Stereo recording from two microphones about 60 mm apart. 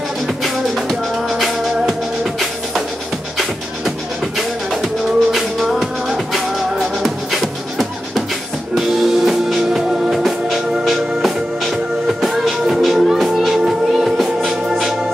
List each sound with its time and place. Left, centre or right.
0.4 s music: centre
4.4 s music: centre